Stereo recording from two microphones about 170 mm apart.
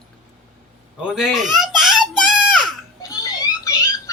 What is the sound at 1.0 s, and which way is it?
Speech, 5° right (ahead or behind).